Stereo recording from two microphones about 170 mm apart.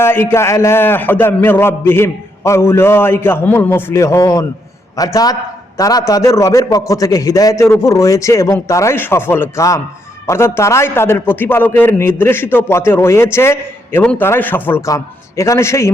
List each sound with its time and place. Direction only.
0.0 s a man's voice: 15° left (ahead or behind)